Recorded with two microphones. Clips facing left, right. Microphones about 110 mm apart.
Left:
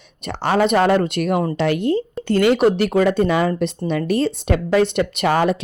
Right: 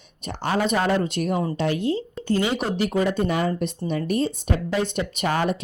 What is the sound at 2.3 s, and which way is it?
Speech, 70° left (ahead or behind).